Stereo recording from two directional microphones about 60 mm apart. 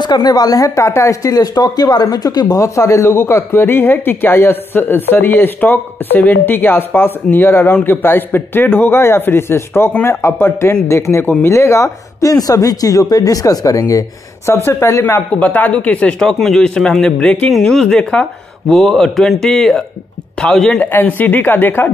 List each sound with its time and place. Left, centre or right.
0.2 s a woman's voice: left
0.7 s speech: left
1.3 s speech: left
14.4 s speech: left
15.3 s speech: left
16.2 s speech: centre
17.5 s speech: centre
20.8 s speech: left